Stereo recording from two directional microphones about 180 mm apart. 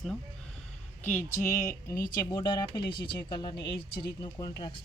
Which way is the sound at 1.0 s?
10° left (ahead or behind).